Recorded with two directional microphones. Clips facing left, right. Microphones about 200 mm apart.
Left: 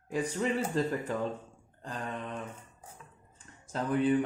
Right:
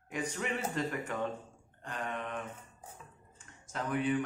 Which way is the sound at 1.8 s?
30° left (ahead or behind).